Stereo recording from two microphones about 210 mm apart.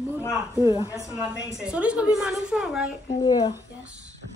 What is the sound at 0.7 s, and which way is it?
Speech, 15° left (ahead or behind).